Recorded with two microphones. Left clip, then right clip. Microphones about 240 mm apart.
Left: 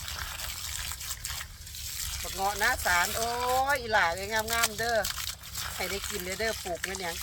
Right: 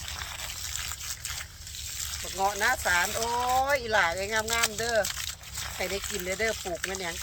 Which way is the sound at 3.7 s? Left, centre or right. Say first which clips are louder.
Right 1 dB; right.